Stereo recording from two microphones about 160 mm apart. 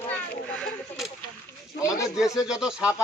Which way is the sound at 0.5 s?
5° left (ahead or behind).